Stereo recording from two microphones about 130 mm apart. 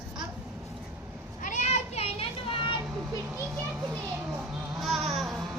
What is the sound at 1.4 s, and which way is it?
Children playing, 75° left (ahead or behind).